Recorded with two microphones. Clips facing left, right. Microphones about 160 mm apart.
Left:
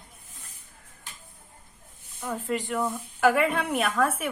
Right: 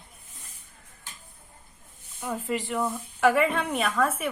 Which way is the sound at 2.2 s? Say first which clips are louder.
Even; 5° right (ahead or behind).